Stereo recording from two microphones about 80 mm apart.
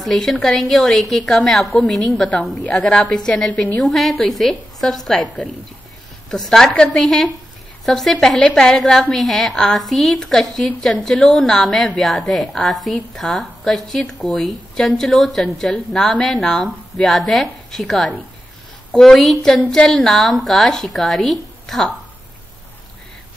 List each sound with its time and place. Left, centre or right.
0.0 s a woman's voice: centre
3.8 s a woman's voice: centre